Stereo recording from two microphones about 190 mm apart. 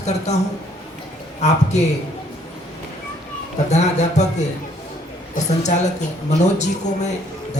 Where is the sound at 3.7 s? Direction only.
35° left (ahead or behind).